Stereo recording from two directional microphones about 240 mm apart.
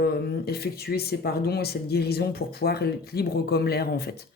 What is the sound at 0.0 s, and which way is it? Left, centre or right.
Speech, left.